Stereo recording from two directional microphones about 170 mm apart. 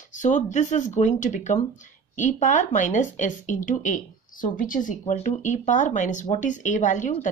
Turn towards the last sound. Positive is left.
turn(degrees=45)  # may be behind; listen again after turning